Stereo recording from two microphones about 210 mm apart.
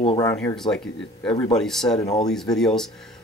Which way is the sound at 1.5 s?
Centre (ahead or behind).